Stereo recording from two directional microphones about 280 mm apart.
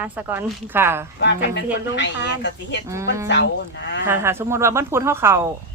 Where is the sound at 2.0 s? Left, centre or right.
Left.